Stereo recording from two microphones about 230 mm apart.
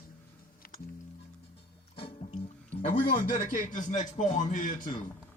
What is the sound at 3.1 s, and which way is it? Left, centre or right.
A man's voice, left.